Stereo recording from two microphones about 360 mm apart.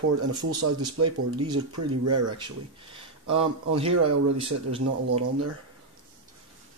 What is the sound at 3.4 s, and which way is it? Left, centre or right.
Speech, centre.